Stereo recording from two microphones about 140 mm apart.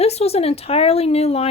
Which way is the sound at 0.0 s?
45° left (ahead or behind).